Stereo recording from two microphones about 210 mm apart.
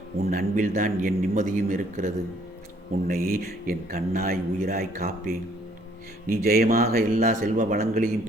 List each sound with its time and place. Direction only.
0.3 s a man's voice: 40° right (ahead or behind)